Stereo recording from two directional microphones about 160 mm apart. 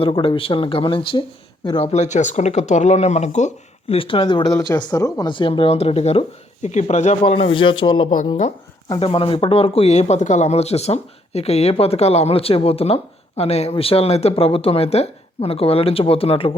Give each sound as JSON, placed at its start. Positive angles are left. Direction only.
{"t": 0.0, "sound": "speech", "side_deg": 35}